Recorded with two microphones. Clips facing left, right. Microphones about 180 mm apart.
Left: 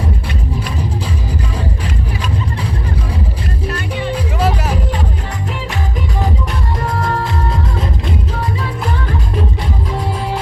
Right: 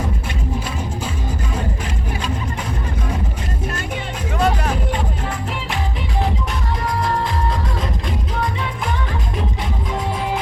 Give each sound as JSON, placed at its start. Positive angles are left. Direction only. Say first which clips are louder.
{"t": 4.4, "sound": "music", "louder": "right 1 dB", "side_deg": 5}